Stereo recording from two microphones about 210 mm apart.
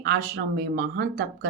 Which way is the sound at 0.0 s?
50° right (ahead or behind).